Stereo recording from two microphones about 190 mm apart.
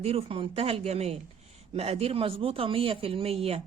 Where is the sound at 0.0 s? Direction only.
30° right (ahead or behind).